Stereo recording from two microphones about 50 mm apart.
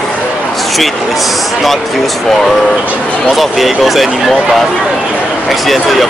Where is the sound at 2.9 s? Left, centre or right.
Left.